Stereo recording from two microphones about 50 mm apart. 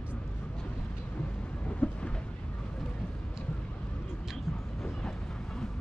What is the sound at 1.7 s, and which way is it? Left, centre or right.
Vehicle, left.